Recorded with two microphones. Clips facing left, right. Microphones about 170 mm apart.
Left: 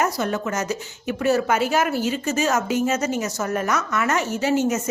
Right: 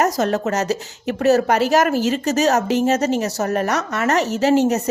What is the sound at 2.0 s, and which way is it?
Speech, 90° right.